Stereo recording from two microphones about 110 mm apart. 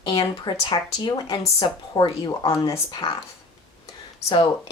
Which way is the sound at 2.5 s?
30° left (ahead or behind).